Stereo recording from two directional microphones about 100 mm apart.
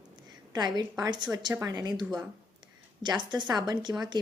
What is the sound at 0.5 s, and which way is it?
Speech, 45° right (ahead or behind).